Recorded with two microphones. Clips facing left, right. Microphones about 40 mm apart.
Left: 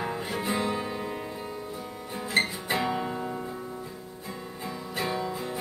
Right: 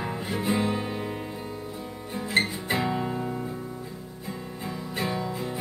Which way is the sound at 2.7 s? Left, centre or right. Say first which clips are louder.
Right 1 dB; centre.